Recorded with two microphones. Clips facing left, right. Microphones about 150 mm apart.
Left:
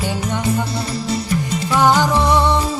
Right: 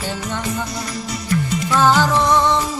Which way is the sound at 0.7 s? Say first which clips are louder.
Left 5 dB; 30° left (ahead or behind).